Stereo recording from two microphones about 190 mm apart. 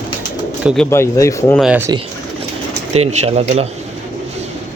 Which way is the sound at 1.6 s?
10° right (ahead or behind).